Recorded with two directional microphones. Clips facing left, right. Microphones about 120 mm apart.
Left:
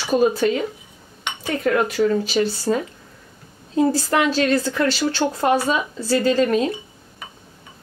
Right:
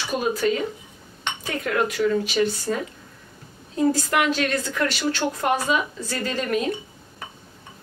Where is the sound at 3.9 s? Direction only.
30° left (ahead or behind).